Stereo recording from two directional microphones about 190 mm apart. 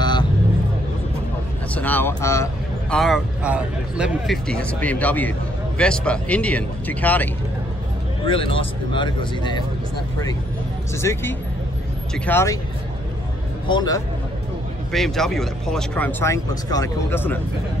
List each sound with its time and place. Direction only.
1.8 s speech: 10° left (ahead or behind)
2.9 s speech: centre (ahead or behind)
8.3 s speech: 30° left (ahead or behind)
11.0 s speech: 15° left (ahead or behind)
13.7 s speech: 20° left (ahead or behind)
14.9 s speech: centre (ahead or behind)